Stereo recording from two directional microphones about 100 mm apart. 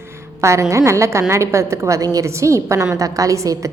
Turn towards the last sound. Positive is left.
turn(degrees=-35)  # may be behind; listen again after turning